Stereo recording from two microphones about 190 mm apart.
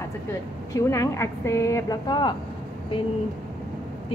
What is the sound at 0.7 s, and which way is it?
Speech, 15° left (ahead or behind).